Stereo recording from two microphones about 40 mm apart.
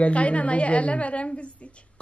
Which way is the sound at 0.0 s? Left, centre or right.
Left.